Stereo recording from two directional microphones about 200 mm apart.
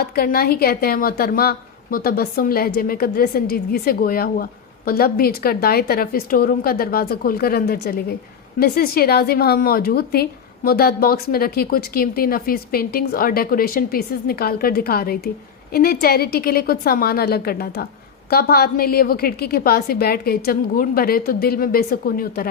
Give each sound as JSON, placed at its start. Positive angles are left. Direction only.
{"t": 0.0, "sound": "a woman's voice", "side_deg": 50}